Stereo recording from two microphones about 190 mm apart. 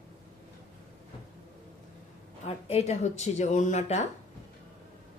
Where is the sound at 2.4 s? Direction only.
35° left (ahead or behind).